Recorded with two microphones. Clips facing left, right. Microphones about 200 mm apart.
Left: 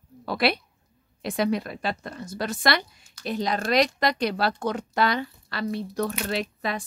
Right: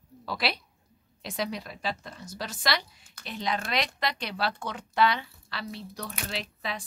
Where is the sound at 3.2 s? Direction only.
40° left (ahead or behind).